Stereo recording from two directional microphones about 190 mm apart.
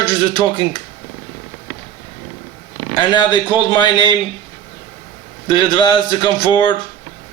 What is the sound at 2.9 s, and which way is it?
A man's voice, 25° left (ahead or behind).